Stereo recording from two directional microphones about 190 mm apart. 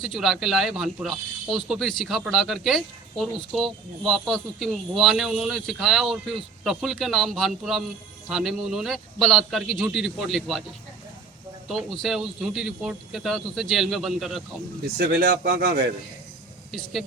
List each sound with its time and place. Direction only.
0.0 s speech: centre (ahead or behind)
11.7 s speech: centre (ahead or behind)
14.9 s speech: 60° right (ahead or behind)
15.5 s a man's voice: 50° right (ahead or behind)
16.7 s speech: centre (ahead or behind)